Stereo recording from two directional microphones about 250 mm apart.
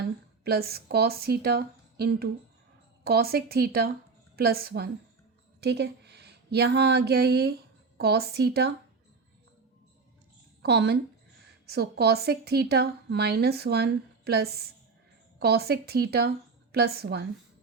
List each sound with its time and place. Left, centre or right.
0.4 s speech: right
5.5 s a sound: right
7.9 s speech: right
10.6 s a woman's voice: right